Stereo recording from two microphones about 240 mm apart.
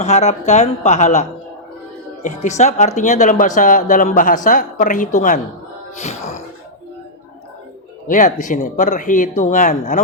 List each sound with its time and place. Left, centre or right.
0.0 s speech: left
8.0 s speech: left